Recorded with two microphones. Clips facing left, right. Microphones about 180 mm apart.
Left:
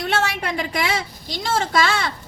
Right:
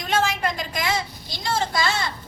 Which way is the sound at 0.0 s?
70° left (ahead or behind).